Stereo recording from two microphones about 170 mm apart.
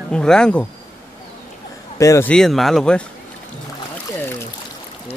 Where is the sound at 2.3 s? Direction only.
Centre (ahead or behind).